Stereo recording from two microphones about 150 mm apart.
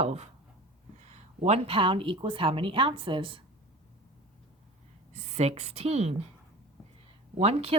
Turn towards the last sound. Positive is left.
turn(degrees=-45)  # may be behind; listen again after turning